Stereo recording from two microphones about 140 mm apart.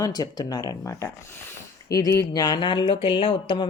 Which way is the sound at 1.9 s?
25° left (ahead or behind).